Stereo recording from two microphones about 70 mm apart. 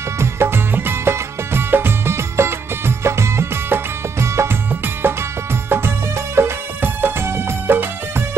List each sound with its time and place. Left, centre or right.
0.2 s music: right